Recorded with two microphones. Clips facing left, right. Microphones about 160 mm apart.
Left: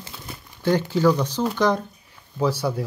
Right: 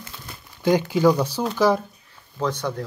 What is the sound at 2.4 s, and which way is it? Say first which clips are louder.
Speech: left 3 dB; 10° left (ahead or behind).